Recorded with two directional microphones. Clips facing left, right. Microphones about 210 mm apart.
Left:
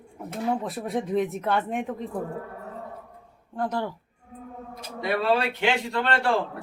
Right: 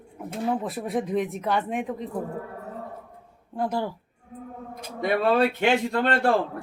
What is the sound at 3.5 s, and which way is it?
Speech, 10° right (ahead or behind).